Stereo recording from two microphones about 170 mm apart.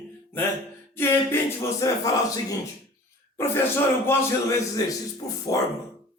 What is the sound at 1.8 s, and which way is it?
Speech, 20° left (ahead or behind).